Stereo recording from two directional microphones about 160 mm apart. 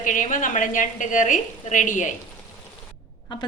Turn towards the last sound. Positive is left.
turn(degrees=30)  # may be behind; listen again after turning